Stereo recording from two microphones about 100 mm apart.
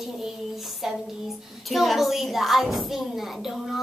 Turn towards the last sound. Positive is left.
turn(degrees=0)  # may be behind; listen again after turning